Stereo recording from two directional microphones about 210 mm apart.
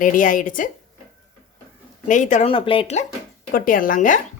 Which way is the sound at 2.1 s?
35° left (ahead or behind).